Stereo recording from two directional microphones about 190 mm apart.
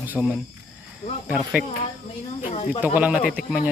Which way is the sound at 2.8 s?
10° right (ahead or behind).